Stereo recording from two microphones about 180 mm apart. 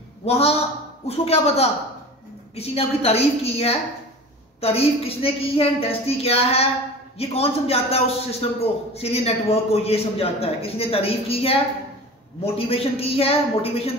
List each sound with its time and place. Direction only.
0.2 s a woman's voice: 35° left (ahead or behind)